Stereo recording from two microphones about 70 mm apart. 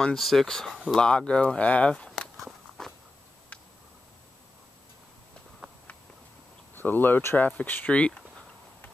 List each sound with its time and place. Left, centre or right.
0.0 s speech: centre
6.7 s speech: left
7.9 s a sound: centre